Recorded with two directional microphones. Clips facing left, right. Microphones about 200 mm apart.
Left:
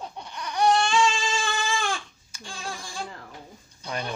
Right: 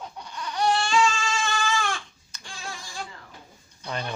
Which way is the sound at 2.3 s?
10° left (ahead or behind).